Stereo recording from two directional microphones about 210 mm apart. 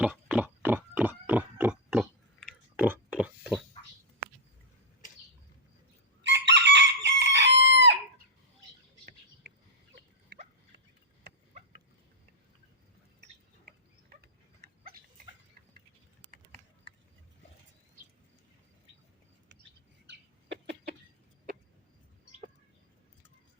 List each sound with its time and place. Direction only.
0.0 s pig: 5° right (ahead or behind)
6.2 s chicken: 55° right (ahead or behind)
13.7 s a sound: 45° right (ahead or behind)
14.2 s dog: 50° right (ahead or behind)
16.2 s typing: 40° right (ahead or behind)